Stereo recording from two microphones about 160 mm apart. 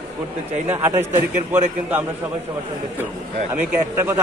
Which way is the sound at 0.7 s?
15° right (ahead or behind).